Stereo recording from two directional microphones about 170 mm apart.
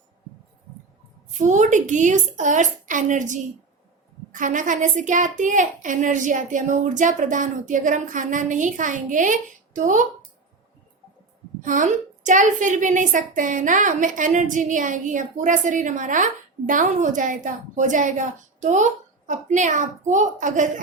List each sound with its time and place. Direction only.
1.4 s a woman's voice: 45° right (ahead or behind)
11.6 s a woman's voice: 50° right (ahead or behind)